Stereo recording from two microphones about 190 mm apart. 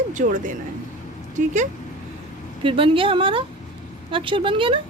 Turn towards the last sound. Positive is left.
turn(degrees=-25)  # may be behind; listen again after turning